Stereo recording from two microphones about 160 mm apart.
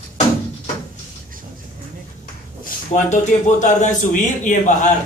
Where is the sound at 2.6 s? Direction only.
50° left (ahead or behind).